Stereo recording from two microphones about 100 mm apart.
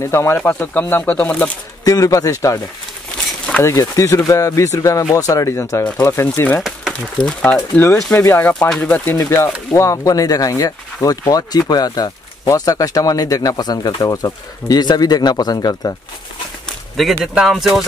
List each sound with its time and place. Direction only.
0.0 s speech: 30° left (ahead or behind)
1.9 s speech: 35° left (ahead or behind)
3.6 s speech: 30° left (ahead or behind)
6.9 s speech: 10° left (ahead or behind)
7.7 s speech: 25° left (ahead or behind)
8.6 s speech: 5° left (ahead or behind)
9.1 s speech: 30° left (ahead or behind)
16.6 s speech: 5° left (ahead or behind)